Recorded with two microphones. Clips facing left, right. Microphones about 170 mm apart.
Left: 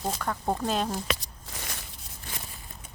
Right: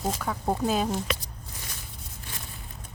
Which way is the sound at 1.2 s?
90° left.